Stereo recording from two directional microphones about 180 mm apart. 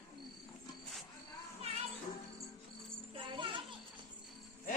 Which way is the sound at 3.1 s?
30° right (ahead or behind).